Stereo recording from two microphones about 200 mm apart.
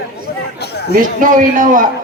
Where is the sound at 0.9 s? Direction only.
40° right (ahead or behind).